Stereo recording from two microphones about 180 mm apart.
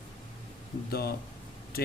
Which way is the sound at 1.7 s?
55° left (ahead or behind).